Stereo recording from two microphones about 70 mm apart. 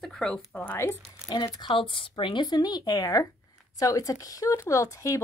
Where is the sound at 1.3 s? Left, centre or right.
Left.